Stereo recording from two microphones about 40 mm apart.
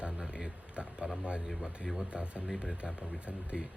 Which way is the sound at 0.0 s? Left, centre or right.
Right.